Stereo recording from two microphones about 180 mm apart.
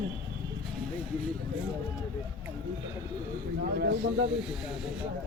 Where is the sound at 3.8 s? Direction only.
80° right.